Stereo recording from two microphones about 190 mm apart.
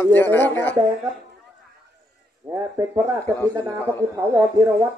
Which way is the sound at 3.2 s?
10° left (ahead or behind).